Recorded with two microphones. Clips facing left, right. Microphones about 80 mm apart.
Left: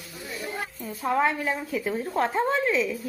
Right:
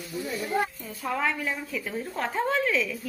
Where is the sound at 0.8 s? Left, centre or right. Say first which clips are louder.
Left 5 dB; left.